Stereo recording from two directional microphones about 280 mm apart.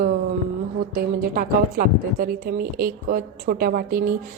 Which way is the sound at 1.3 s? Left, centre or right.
Right.